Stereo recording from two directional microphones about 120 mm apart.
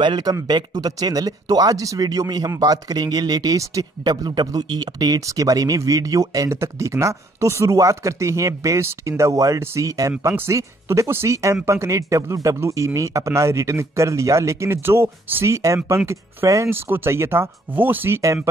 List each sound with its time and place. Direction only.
0.0 s speech: 40° right (ahead or behind); by 18.5 s 25° right (ahead or behind)